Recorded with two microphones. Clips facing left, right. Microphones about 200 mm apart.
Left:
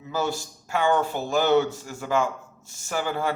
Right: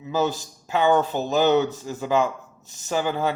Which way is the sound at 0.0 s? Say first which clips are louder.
Right 4 dB; 20° right (ahead or behind).